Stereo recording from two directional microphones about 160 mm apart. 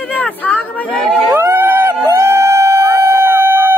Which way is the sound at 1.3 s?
10° right (ahead or behind).